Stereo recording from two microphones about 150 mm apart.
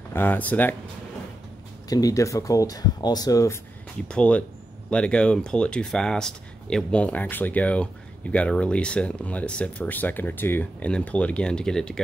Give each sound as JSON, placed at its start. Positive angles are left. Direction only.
{"t": 0.1, "sound": "speech", "side_deg": 10}
{"t": 1.9, "sound": "speech", "side_deg": 25}
{"t": 4.1, "sound": "speech", "side_deg": 10}